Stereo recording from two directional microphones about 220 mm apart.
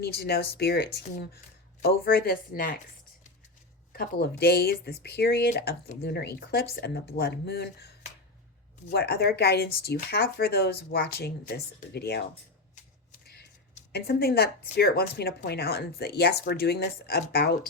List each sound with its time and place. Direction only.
0.0 s speech: 45° left (ahead or behind)
3.9 s speech: 45° left (ahead or behind)
8.9 s speech: 45° left (ahead or behind)
13.2 s typing: 45° left (ahead or behind)
13.9 s speech: 45° left (ahead or behind)